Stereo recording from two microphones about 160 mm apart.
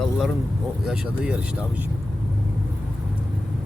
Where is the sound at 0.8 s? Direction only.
5° right (ahead or behind).